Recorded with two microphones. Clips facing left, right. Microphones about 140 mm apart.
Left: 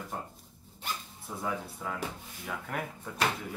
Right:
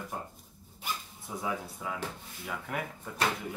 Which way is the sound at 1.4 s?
5° right (ahead or behind).